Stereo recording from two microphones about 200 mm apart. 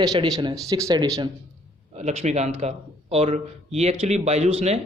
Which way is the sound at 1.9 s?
30° right (ahead or behind).